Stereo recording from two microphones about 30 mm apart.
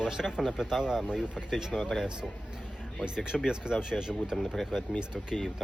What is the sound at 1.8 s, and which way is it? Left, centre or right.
Speech, centre.